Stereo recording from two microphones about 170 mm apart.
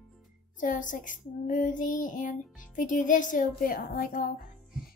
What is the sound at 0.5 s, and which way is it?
Child singing, 50° left (ahead or behind).